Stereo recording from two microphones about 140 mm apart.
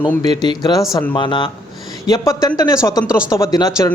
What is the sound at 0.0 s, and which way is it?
A man's voice, 30° left (ahead or behind).